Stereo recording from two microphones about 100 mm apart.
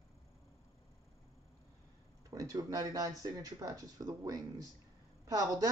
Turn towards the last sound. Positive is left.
turn(degrees=-40)  # may be behind; listen again after turning